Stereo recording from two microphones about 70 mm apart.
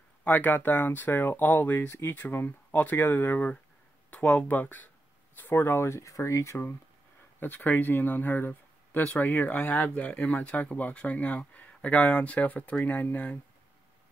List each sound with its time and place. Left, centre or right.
0.2 s speech: left
1.9 s speech: left
2.1 s speech: left
7.3 s speech: left